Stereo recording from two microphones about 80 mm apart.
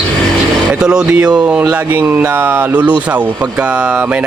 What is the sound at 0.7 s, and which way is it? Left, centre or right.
Speech, centre.